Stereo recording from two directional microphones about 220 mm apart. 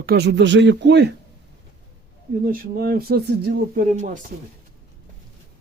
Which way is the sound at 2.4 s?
40° right (ahead or behind).